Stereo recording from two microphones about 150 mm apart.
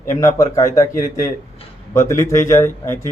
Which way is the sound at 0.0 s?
20° left (ahead or behind).